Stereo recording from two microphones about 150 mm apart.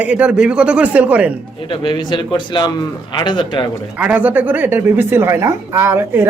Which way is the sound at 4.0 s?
10° right (ahead or behind).